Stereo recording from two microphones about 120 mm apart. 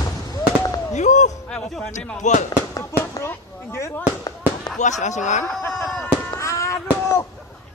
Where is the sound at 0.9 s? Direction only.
85° left.